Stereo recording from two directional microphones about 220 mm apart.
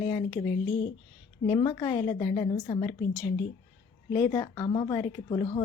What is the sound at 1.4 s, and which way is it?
Speech, 20° left (ahead or behind).